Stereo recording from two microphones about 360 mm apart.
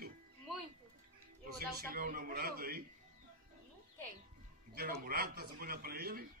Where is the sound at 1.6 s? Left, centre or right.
Right.